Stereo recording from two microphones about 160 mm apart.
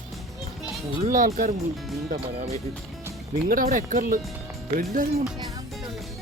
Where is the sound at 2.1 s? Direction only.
40° right (ahead or behind).